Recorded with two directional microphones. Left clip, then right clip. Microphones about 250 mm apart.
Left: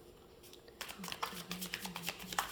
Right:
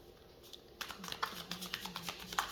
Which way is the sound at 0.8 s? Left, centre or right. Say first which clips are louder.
Right 1 dB; centre.